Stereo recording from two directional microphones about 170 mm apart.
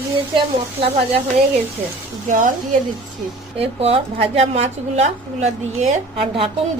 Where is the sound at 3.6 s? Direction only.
35° right (ahead or behind).